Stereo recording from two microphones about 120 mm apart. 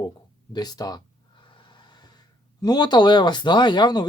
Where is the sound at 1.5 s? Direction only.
40° left (ahead or behind).